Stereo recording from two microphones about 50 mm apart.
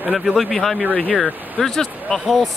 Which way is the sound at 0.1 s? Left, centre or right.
Centre.